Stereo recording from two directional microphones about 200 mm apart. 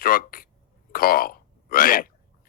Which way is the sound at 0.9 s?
45° left (ahead or behind).